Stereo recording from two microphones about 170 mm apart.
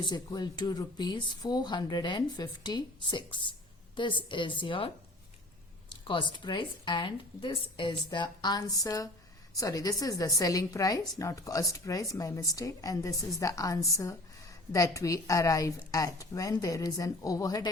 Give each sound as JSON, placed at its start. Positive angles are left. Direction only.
{"t": 0.0, "sound": "speech", "side_deg": 25}
{"t": 6.1, "sound": "speech", "side_deg": 30}